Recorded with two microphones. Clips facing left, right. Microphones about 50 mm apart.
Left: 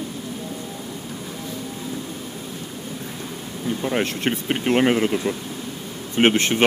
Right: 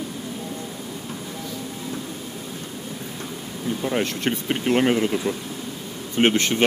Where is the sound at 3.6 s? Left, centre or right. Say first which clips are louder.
Left 1 dB; centre.